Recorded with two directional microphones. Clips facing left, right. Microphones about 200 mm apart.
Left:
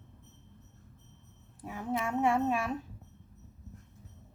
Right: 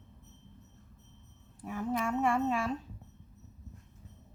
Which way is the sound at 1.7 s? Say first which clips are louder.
Right 1 dB; 20° left (ahead or behind).